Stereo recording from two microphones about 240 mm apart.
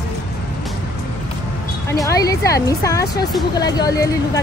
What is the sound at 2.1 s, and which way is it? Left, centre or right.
Speech, centre.